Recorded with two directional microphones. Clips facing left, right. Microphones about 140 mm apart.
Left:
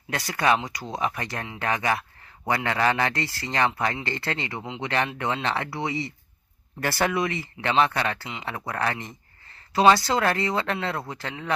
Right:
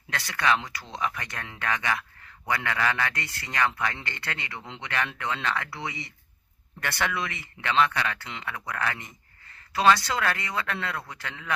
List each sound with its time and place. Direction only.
0.1 s speech: 25° left (ahead or behind)